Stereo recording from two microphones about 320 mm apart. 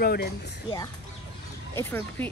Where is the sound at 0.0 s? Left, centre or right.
Left.